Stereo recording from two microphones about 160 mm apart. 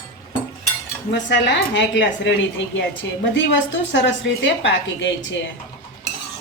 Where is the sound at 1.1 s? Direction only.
90° left.